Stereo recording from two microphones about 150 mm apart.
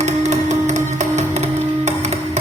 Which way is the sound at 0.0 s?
50° right (ahead or behind).